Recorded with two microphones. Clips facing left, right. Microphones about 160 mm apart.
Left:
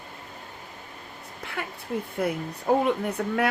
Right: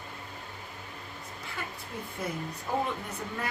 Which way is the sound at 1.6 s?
65° left (ahead or behind).